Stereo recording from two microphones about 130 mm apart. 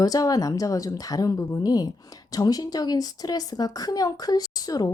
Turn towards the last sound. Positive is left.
turn(degrees=30)  # may be behind; listen again after turning